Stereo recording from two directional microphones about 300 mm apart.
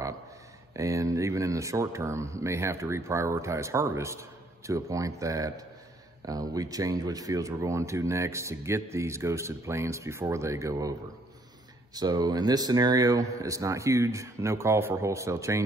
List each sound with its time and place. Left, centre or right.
0.7 s speech: centre